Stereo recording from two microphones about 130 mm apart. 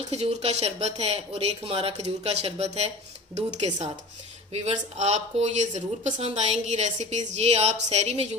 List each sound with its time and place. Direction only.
0.1 s a woman's voice: 55° right (ahead or behind)